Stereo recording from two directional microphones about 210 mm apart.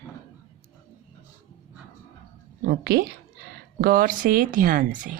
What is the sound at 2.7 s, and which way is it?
A woman's voice, 45° right (ahead or behind).